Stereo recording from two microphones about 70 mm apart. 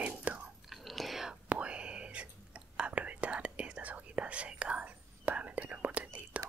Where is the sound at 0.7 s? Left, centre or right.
Centre.